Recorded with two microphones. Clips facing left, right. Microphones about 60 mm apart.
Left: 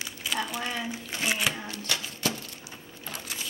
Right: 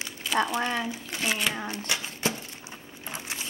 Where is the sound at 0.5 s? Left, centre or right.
Right.